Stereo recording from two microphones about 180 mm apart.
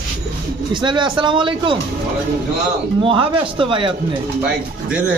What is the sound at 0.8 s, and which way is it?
Speech, 25° right (ahead or behind).